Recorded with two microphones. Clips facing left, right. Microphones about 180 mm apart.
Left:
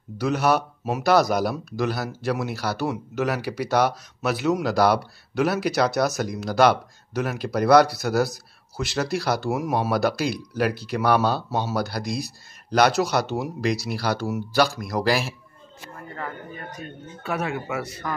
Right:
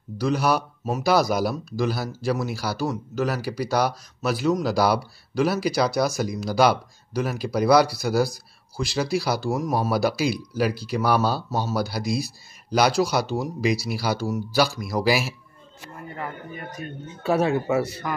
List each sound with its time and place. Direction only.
0.2 s a man's voice: centre (ahead or behind)
17.2 s speech: 30° right (ahead or behind)